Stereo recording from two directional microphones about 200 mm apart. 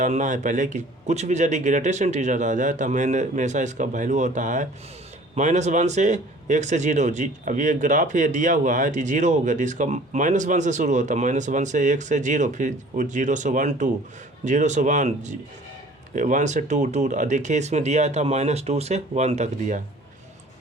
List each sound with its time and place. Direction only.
0.0 s a man's voice: 40° right (ahead or behind)